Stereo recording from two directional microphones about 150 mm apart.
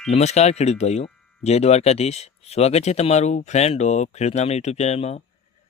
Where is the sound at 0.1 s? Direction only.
45° left (ahead or behind).